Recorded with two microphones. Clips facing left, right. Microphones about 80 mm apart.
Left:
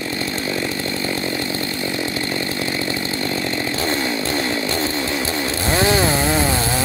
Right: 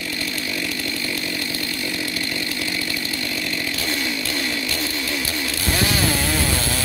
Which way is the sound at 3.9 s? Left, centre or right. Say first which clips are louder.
Left 4 dB; left.